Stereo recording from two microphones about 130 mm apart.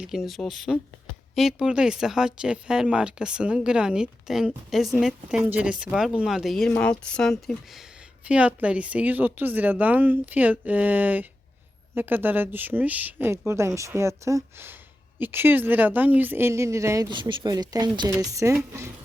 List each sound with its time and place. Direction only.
0.0 s speech: 5° right (ahead or behind); by 17.1 s 25° right (ahead or behind)
17.1 s speech: 35° right (ahead or behind); by 18.9 s 20° right (ahead or behind)